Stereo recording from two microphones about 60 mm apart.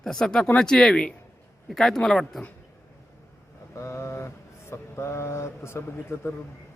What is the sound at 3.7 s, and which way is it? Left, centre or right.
Mantra, left.